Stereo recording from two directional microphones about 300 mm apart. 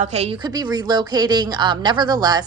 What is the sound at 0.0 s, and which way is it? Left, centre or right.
A woman's voice, right.